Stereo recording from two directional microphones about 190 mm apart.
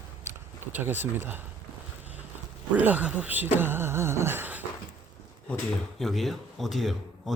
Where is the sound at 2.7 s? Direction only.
10° right (ahead or behind).